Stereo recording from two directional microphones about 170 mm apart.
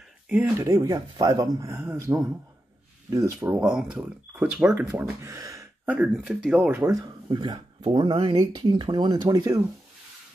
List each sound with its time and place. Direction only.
0.3 s speech: 10° right (ahead or behind)
5.9 s speech: 5° right (ahead or behind); by 9.6 s 20° right (ahead or behind)